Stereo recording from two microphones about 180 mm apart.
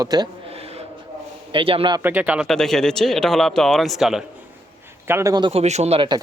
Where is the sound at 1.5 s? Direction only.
30° right (ahead or behind).